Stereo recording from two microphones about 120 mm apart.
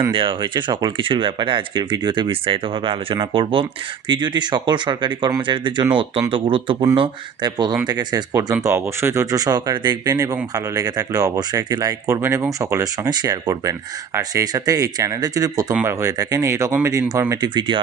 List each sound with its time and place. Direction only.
0.1 s speech: 45° right (ahead or behind); by 9.2 s 20° right (ahead or behind)
9.3 s speech: 30° right (ahead or behind)